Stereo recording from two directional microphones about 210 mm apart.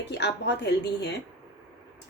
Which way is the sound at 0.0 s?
55° left (ahead or behind).